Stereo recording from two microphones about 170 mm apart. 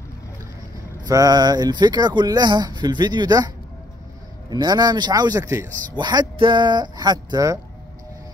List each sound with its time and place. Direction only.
1.0 s speech: 20° right (ahead or behind)